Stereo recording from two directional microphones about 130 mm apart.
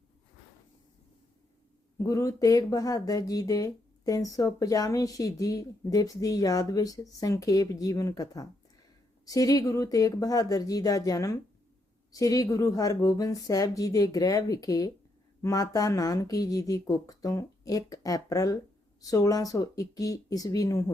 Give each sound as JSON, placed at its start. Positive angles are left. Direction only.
{"t": 2.0, "sound": "speech", "side_deg": 25}